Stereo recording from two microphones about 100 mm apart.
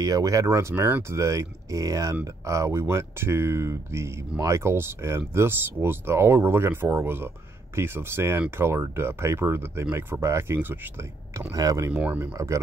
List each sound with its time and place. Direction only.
0.0 s speech: 35° right (ahead or behind)
11.9 s speech: 15° right (ahead or behind)
12.4 s speech: 35° right (ahead or behind)